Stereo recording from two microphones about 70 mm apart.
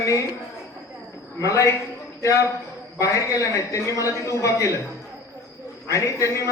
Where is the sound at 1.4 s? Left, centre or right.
Left.